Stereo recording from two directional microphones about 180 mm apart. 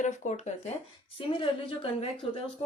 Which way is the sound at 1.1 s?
30° left (ahead or behind).